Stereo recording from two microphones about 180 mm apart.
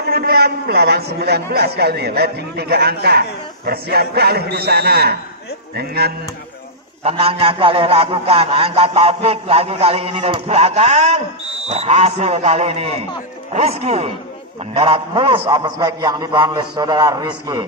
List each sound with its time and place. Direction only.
0.1 s a man's voice: 60° right (ahead or behind)
7.0 s a man's voice: 35° right (ahead or behind)